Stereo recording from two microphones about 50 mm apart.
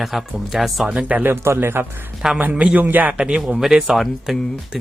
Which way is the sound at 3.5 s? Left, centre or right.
Centre.